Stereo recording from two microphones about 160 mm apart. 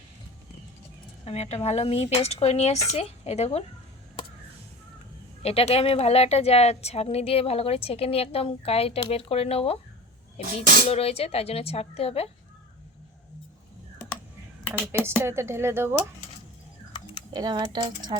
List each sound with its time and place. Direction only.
1.2 s a woman's voice: 40° left (ahead or behind)
5.4 s a woman's voice: 40° left (ahead or behind)
15.2 s speech: 15° right (ahead or behind)
17.3 s speech: 25° right (ahead or behind)